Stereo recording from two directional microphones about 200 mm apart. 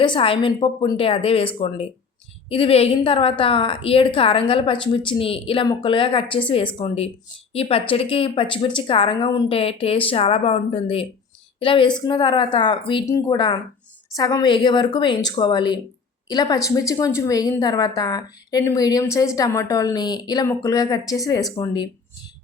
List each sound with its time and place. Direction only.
0.0 s a woman's voice: 25° left (ahead or behind)